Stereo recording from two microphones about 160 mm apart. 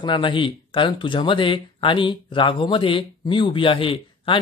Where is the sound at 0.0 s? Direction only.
30° left (ahead or behind).